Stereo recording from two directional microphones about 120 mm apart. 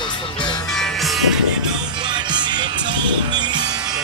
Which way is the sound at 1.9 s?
40° right (ahead or behind).